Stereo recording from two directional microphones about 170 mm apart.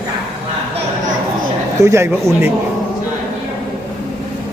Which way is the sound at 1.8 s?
15° right (ahead or behind).